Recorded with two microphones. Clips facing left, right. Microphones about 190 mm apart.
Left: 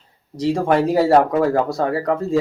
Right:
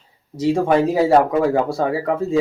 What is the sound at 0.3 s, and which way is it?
Speech, centre (ahead or behind).